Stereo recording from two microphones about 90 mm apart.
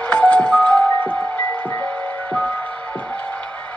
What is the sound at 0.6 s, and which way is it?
Music, 15° left (ahead or behind).